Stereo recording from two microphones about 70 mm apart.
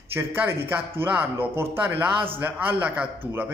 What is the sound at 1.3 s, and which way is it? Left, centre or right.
A man's voice, right.